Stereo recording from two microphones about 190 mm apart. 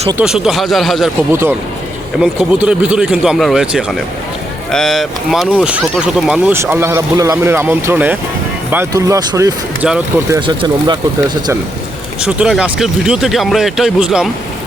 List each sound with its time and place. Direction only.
0.2 s speech: 5° right (ahead or behind)
1.3 s speech: 10° right (ahead or behind)
12.2 s speech: 5° right (ahead or behind)